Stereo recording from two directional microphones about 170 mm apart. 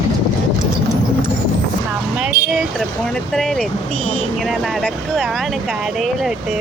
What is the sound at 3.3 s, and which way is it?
Speech, 5° left (ahead or behind).